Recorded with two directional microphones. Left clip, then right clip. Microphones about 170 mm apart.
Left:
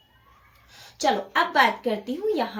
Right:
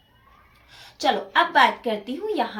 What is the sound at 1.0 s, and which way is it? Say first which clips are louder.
Speech: right 2 dB; 20° right (ahead or behind).